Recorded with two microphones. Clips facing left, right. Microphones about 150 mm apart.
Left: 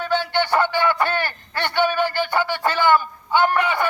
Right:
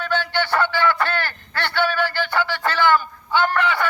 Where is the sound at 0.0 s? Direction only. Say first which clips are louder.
Left 2 dB; 15° left (ahead or behind).